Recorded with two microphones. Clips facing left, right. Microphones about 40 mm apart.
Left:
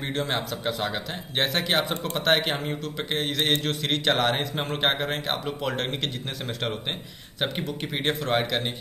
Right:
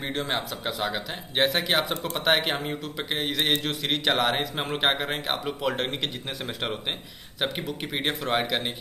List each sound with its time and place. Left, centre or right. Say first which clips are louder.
0.1 s a man's voice: left 2 dB; centre
7.3 s a man's voice: even; centre